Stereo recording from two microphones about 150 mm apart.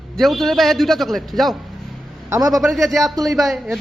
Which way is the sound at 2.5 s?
Centre (ahead or behind).